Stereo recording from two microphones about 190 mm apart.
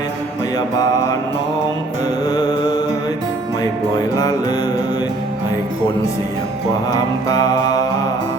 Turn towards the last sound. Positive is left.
turn(degrees=20)  # may be behind; listen again after turning